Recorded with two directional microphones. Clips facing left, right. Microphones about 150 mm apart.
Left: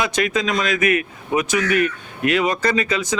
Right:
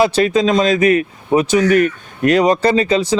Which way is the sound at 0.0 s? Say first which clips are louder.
Right 8 dB; 30° right (ahead or behind).